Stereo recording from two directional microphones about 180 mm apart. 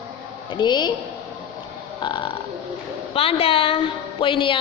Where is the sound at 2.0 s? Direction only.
25° left (ahead or behind).